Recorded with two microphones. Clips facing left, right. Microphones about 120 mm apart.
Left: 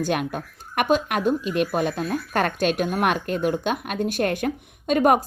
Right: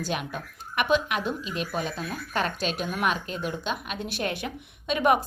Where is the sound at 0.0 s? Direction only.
55° left (ahead or behind).